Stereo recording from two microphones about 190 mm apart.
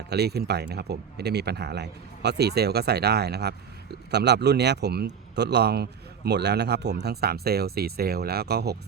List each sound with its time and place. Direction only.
0.1 s a man's voice: 60° right (ahead or behind)